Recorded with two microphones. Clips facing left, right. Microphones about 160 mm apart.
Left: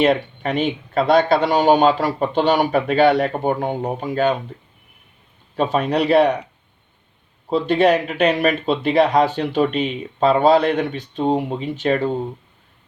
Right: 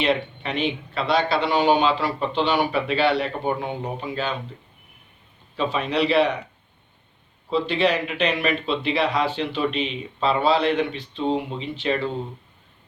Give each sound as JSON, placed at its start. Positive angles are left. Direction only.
{"t": 0.0, "sound": "speech", "side_deg": 45}
{"t": 5.5, "sound": "speech", "side_deg": 45}
{"t": 7.5, "sound": "speech", "side_deg": 45}